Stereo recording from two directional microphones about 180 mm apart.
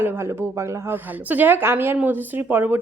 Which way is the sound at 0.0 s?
15° right (ahead or behind).